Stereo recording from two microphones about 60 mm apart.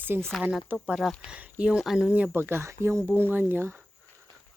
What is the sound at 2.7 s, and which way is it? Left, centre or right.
Speech, right.